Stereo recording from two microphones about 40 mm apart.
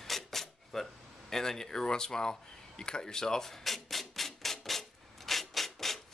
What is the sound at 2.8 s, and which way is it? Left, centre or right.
Rub, centre.